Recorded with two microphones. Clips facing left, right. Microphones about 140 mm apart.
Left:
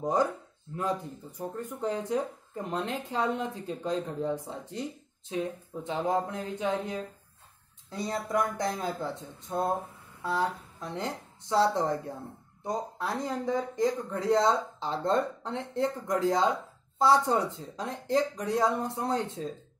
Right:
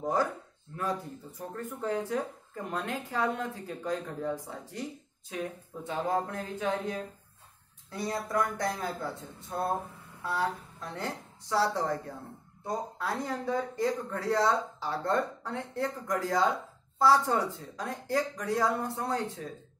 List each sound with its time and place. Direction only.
0.0 s speech: 20° left (ahead or behind)